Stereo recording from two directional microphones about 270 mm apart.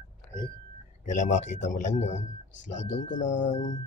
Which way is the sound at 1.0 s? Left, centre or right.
Left.